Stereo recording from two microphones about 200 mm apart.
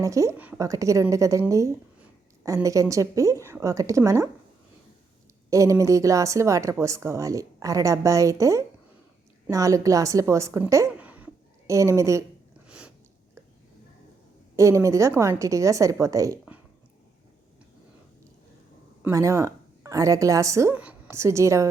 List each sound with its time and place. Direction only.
0.0 s a woman's voice: 15° right (ahead or behind)
5.5 s a woman's voice: 15° right (ahead or behind)
12.6 s a sound: 5° right (ahead or behind)
14.5 s speech: 15° right (ahead or behind)
19.0 s a woman's voice: 15° right (ahead or behind)